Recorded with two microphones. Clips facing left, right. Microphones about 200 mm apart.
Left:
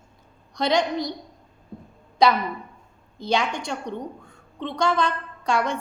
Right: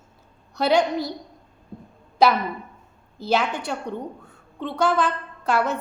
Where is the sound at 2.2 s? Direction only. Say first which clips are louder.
Right 1 dB; 5° right (ahead or behind).